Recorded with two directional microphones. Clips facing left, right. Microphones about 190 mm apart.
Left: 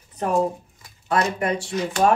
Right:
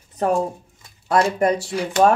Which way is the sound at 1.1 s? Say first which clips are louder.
Right 4 dB; 35° right (ahead or behind).